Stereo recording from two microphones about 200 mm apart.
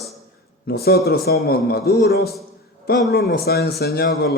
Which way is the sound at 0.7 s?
50° left (ahead or behind).